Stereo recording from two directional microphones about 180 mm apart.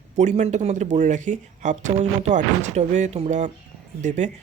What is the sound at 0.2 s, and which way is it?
Speech, 40° right (ahead or behind).